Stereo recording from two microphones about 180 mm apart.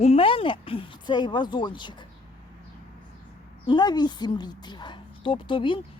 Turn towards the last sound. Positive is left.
turn(degrees=25)  # may be behind; listen again after turning